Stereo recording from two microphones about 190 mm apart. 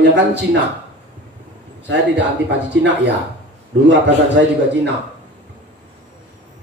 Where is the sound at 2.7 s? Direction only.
65° right (ahead or behind).